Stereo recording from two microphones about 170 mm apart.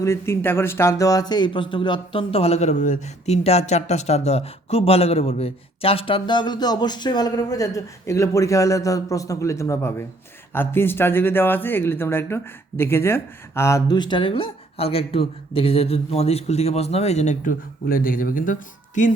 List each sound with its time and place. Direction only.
0.0 s speech: 15° left (ahead or behind); by 18.5 s 55° left (ahead or behind)